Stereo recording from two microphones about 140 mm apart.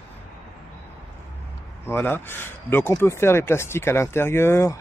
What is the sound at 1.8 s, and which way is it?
Speech, 15° left (ahead or behind).